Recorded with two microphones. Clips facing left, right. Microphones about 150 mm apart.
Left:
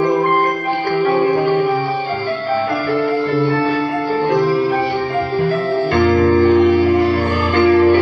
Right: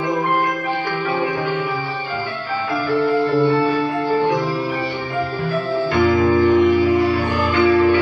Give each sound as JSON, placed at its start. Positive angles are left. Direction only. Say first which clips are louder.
{"t": 1.0, "sound": "music", "louder": "left 9 dB", "side_deg": 50}
{"t": 5.9, "sound": "music", "louder": "left 2 dB", "side_deg": 60}